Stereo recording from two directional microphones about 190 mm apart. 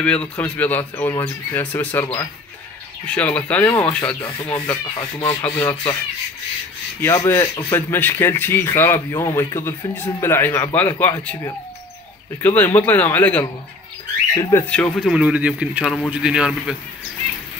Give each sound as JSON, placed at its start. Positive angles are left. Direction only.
{"t": 0.0, "sound": "a man's voice", "side_deg": 5}
{"t": 3.1, "sound": "a man's voice", "side_deg": 5}
{"t": 7.0, "sound": "a man's voice", "side_deg": 10}
{"t": 14.7, "sound": "speech", "side_deg": 0}